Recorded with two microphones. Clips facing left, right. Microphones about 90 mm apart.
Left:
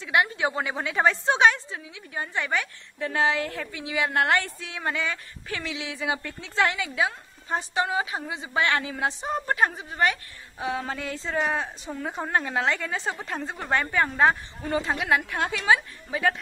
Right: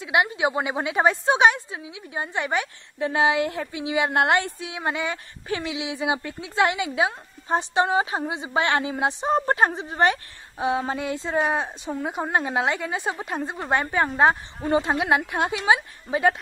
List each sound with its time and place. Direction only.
0.0 s a woman's voice: 15° right (ahead or behind); by 8.3 s 30° right (ahead or behind)
8.3 s a woman's voice: 20° right (ahead or behind)